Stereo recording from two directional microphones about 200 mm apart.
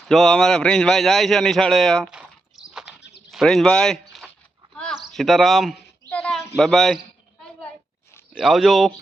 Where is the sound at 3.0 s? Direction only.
60° left (ahead or behind).